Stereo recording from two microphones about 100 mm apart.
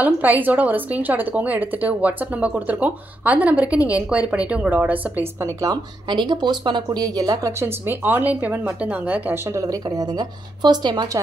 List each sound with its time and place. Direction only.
0.0 s a woman's voice: 15° right (ahead or behind)
5.6 s speech: 45° right (ahead or behind)
7.6 s speech: 20° right (ahead or behind)
9.5 s speech: 35° right (ahead or behind)